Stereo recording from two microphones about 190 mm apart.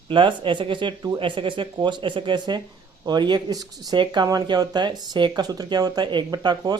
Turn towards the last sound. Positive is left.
turn(degrees=-20)  # may be behind; listen again after turning